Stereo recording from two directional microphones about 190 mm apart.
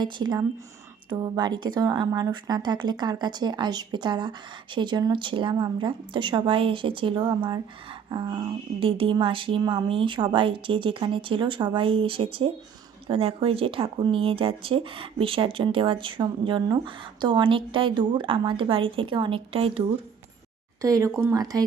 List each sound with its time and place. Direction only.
0.0 s speech: 20° right (ahead or behind)
20.8 s speech: 20° right (ahead or behind)